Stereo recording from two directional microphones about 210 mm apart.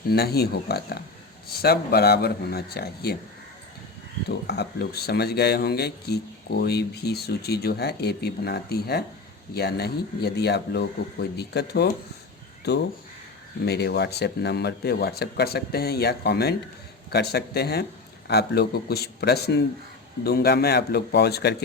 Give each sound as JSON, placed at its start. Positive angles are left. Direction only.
{"t": 0.1, "sound": "speech", "side_deg": 50}
{"t": 4.3, "sound": "speech", "side_deg": 50}